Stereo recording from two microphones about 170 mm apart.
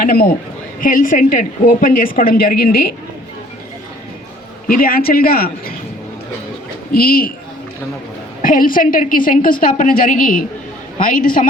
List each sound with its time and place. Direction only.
0.0 s a woman's voice: 60° left (ahead or behind)
4.8 s a woman's voice: 60° left (ahead or behind)
6.9 s a woman's voice: 60° left (ahead or behind)
8.4 s a woman's voice: 55° left (ahead or behind)